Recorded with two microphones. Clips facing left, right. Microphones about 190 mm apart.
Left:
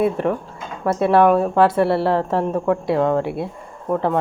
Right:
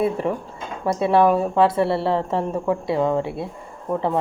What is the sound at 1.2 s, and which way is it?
Speech, 65° left (ahead or behind).